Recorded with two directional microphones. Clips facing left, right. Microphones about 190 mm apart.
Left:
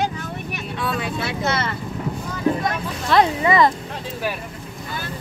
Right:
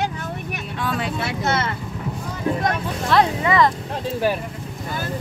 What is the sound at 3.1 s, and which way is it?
Speech, 10° left (ahead or behind).